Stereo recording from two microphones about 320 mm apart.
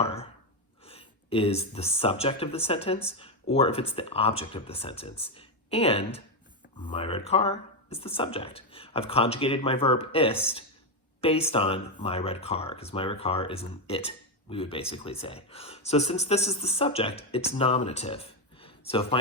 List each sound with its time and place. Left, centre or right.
0.0 s gasp: centre
0.9 s speech: centre